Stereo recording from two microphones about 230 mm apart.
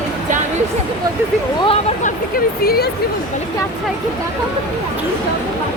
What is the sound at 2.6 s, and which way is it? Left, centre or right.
Speech, left.